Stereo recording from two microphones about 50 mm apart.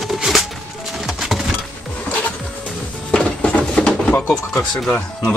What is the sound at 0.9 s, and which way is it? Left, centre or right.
Music, centre.